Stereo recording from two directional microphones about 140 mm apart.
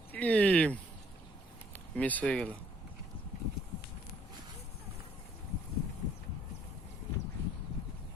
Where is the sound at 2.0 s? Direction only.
10° left (ahead or behind).